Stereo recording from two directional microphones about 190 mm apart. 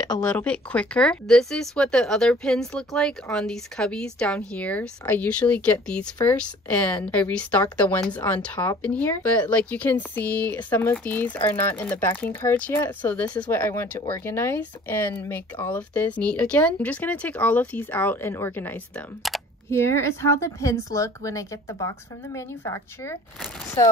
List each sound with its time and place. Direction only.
0.2 s speech: 5° left (ahead or behind)
19.2 s speech: centre (ahead or behind)
19.7 s speech: 15° left (ahead or behind)